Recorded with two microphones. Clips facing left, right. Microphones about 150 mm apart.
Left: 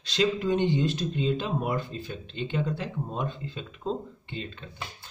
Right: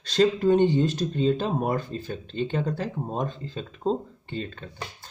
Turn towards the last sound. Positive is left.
turn(degrees=-45)  # may be behind; listen again after turning